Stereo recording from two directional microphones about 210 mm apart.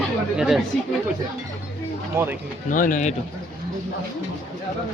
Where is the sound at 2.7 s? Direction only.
40° left (ahead or behind).